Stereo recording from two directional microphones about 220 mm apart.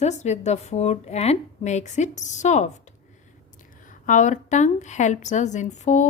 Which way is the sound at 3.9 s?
35° left (ahead or behind).